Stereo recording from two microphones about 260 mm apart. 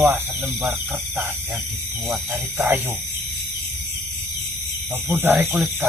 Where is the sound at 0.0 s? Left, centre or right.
Centre.